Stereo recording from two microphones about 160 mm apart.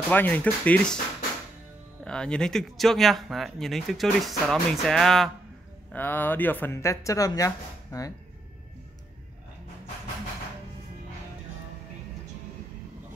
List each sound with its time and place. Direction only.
0.1 s speech: 10° left (ahead or behind)
2.0 s speech: 5° left (ahead or behind); by 8.1 s 20° left (ahead or behind)